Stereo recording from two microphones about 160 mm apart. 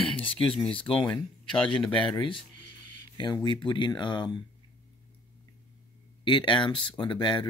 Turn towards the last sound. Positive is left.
turn(degrees=30)  # may be behind; listen again after turning